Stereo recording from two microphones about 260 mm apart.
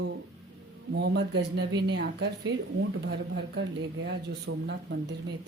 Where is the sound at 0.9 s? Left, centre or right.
Right.